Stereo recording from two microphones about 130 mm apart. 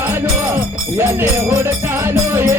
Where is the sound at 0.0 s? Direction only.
15° right (ahead or behind).